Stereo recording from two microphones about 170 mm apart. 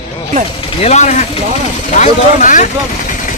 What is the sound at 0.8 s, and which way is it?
Speech, 40° left (ahead or behind).